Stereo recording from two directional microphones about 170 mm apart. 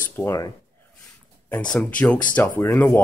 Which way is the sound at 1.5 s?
5° left (ahead or behind).